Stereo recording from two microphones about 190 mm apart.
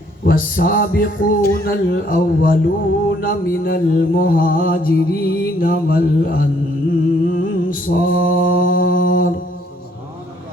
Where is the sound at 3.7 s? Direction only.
50° left (ahead or behind).